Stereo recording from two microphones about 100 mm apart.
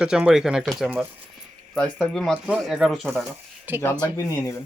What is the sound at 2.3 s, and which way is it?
Speech, 10° right (ahead or behind).